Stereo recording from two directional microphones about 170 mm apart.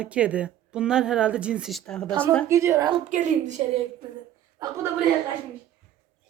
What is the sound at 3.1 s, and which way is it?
Speech, 45° right (ahead or behind).